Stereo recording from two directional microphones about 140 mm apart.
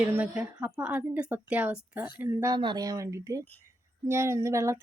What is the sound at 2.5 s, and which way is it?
A woman's voice, 30° right (ahead or behind).